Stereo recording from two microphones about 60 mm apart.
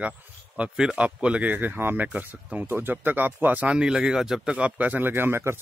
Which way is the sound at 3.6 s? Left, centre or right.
Centre.